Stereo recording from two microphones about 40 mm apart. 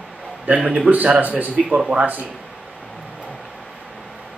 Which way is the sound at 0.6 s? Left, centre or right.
Centre.